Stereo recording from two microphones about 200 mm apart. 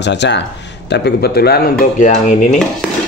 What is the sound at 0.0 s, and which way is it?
Speech, 60° left (ahead or behind).